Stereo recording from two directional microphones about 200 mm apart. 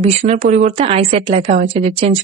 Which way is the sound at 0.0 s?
35° right (ahead or behind).